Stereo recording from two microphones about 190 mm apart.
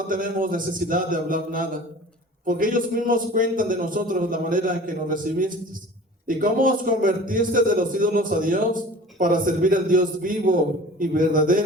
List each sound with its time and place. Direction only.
0.1 s a man's voice: 45° right (ahead or behind)